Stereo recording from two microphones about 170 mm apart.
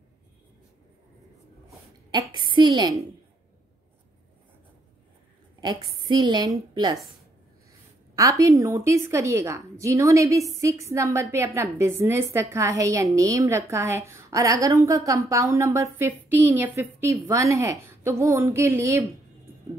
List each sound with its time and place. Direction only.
2.3 s a woman's voice: 25° right (ahead or behind)
6.0 s a woman's voice: 25° right (ahead or behind)
8.2 s a woman's voice: 20° right (ahead or behind)